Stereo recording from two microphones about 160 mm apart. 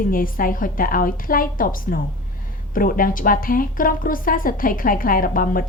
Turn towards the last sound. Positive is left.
turn(degrees=60)  # may be behind; listen again after turning